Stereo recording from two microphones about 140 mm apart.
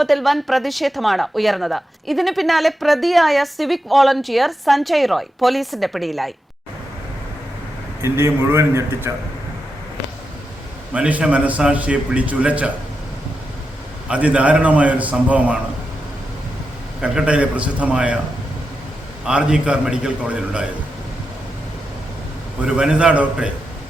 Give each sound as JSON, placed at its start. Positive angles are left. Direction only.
{"t": 0.0, "sound": "speech", "side_deg": 0}
{"t": 8.0, "sound": "a man's voice", "side_deg": -20}
{"t": 10.9, "sound": "a man's voice", "side_deg": -10}
{"t": 14.1, "sound": "a man's voice", "side_deg": -10}
{"t": 17.0, "sound": "a man's voice", "side_deg": -10}
{"t": 19.2, "sound": "speech", "side_deg": -5}
{"t": 22.6, "sound": "a man's voice", "side_deg": -5}